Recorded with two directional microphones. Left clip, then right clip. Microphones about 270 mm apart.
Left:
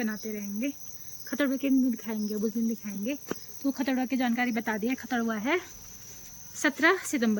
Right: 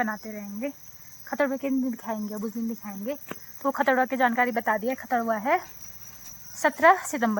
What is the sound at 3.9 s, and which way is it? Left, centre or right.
Speech, right.